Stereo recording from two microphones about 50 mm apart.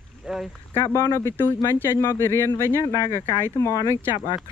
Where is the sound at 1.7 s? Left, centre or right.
Left.